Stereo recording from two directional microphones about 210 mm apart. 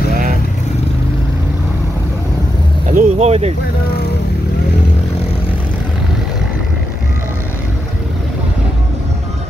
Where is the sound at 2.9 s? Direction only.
35° right (ahead or behind).